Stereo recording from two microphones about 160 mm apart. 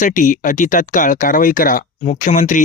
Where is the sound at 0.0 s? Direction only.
55° left (ahead or behind).